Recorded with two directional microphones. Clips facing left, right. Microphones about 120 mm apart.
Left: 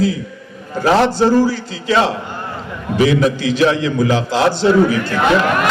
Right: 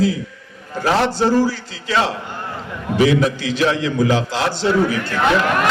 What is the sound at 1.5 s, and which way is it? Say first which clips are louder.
A man's voice: left 5 dB; 20° left (ahead or behind).